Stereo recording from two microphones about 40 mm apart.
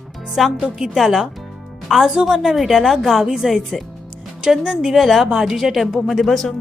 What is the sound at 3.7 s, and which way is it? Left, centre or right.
Speech, centre.